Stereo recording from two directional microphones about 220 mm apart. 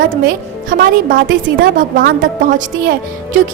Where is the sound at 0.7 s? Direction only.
40° right (ahead or behind).